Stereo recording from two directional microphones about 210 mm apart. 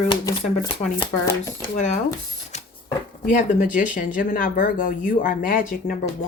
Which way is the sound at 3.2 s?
40° left (ahead or behind).